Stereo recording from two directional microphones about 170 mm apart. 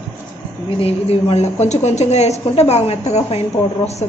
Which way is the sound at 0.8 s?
35° left (ahead or behind).